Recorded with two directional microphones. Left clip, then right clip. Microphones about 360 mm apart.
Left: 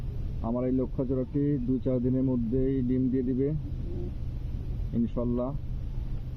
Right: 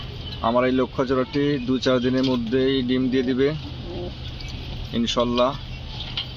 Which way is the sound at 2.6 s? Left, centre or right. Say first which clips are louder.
Right 8 dB; right.